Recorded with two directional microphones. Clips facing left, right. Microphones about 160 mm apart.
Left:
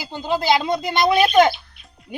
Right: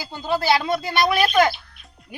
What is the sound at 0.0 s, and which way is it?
Speech, 20° left (ahead or behind).